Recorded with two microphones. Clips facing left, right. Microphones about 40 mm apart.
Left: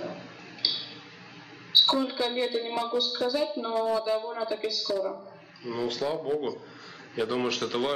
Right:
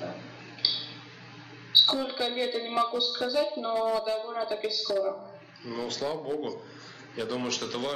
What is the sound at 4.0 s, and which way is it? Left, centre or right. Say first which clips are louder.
Speech: left 1 dB; centre.